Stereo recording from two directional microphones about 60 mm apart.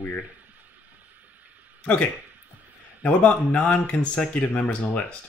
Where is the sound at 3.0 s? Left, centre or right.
Left.